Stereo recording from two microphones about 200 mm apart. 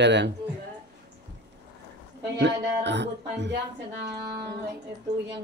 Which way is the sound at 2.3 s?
60° right (ahead or behind).